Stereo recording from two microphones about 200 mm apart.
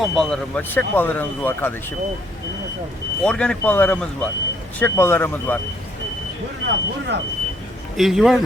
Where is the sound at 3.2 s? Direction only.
5° left (ahead or behind).